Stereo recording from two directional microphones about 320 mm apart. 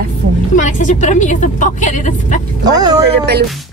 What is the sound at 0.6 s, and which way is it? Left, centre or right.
Speech, left.